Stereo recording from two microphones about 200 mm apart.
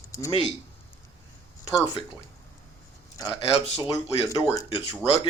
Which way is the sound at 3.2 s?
20° left (ahead or behind).